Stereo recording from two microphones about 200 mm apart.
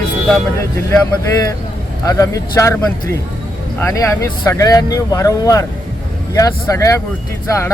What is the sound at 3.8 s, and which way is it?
Speech, 15° left (ahead or behind).